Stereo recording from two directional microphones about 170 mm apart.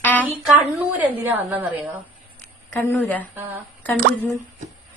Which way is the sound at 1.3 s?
10° right (ahead or behind).